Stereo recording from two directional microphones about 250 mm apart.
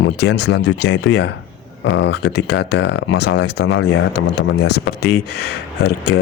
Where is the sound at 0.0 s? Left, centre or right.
Left.